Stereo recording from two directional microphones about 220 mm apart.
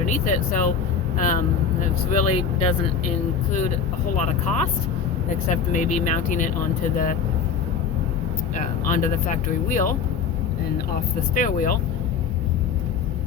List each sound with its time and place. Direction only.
0.0 s speech: 35° left (ahead or behind)
5.7 s speech: 35° left (ahead or behind)
8.5 s speech: 35° left (ahead or behind)
11.3 s speech: 40° left (ahead or behind)